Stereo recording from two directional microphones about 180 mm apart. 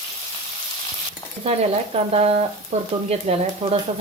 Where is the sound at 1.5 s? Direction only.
35° right (ahead or behind).